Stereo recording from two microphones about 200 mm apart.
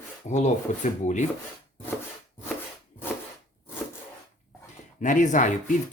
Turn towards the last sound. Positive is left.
turn(degrees=40)  # may be behind; listen again after turning